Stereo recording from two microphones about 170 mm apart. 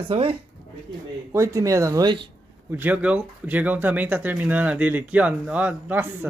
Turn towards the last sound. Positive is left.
turn(degrees=-15)  # may be behind; listen again after turning